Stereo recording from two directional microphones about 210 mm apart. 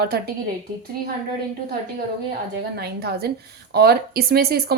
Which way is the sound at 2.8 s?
50° right (ahead or behind).